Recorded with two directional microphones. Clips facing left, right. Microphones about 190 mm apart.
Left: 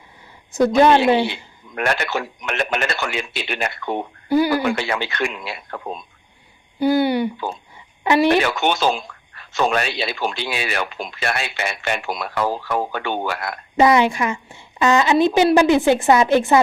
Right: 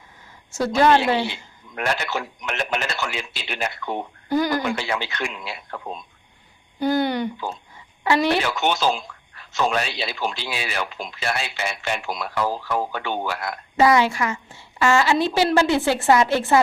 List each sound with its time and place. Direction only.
0.5 s a woman's voice: 15° left (ahead or behind)
1.7 s speech: 60° left (ahead or behind)
4.3 s a woman's voice: 10° left (ahead or behind)
4.6 s speech: 60° left (ahead or behind)
6.7 s a woman's voice: 10° left (ahead or behind)
8.3 s speech: 60° left (ahead or behind)
13.7 s a woman's voice: 20° left (ahead or behind)